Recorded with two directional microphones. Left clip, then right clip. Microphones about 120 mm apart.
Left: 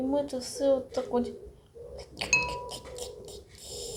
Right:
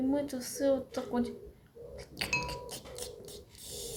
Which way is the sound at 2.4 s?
10° left (ahead or behind).